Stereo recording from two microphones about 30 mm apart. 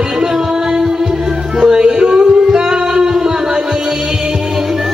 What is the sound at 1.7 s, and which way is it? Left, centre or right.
Singing, right.